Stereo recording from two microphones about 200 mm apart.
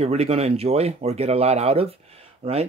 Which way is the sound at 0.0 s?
30° right (ahead or behind).